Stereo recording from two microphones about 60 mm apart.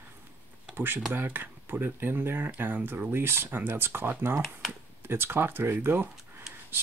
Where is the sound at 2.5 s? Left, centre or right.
Right.